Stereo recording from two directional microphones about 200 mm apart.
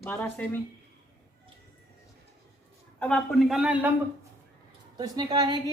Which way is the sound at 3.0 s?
5° left (ahead or behind).